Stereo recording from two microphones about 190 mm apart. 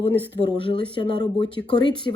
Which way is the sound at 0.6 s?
25° left (ahead or behind).